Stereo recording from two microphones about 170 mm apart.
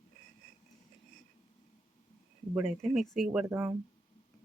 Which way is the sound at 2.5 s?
Centre (ahead or behind).